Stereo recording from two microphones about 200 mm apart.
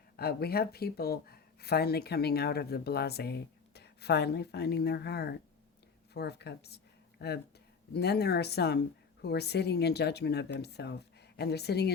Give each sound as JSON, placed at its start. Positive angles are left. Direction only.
{"t": 0.2, "sound": "speech", "side_deg": 50}